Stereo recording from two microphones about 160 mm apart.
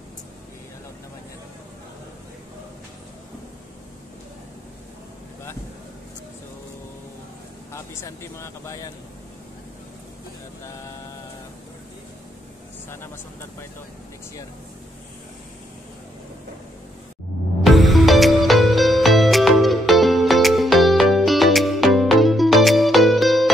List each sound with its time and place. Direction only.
7.7 s speech: 15° left (ahead or behind)
17.6 s music: centre (ahead or behind)